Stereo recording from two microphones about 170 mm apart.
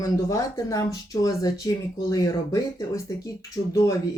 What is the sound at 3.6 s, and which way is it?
Speech, 35° left (ahead or behind).